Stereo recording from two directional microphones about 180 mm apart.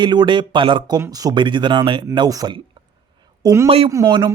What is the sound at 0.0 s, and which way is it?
Speech, 25° right (ahead or behind).